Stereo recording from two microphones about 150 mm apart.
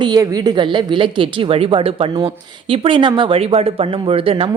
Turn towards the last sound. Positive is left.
turn(degrees=-40)  # may be behind; listen again after turning